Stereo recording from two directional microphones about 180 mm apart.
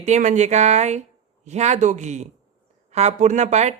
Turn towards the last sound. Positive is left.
turn(degrees=-40)  # may be behind; listen again after turning